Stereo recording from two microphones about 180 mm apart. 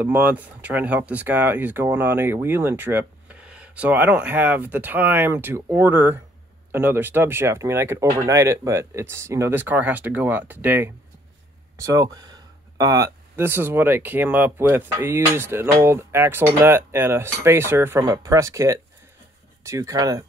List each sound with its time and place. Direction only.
0.0 s speech: 10° right (ahead or behind)